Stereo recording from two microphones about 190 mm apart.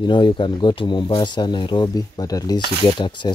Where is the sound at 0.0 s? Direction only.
25° left (ahead or behind).